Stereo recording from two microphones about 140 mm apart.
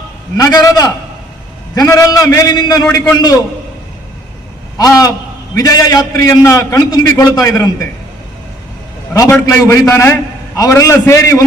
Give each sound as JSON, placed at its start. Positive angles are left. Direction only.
{"t": 0.3, "sound": "a man's voice", "side_deg": 25}
{"t": 4.8, "sound": "a man's voice", "side_deg": 25}
{"t": 9.3, "sound": "a man's voice", "side_deg": 20}